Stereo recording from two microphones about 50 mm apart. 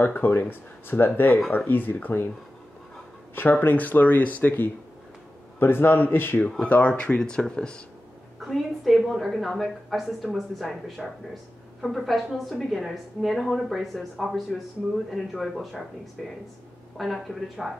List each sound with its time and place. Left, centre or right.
0.0 s speech: left
3.3 s a man's voice: left
6.6 s speech: left
8.4 s a woman's voice: centre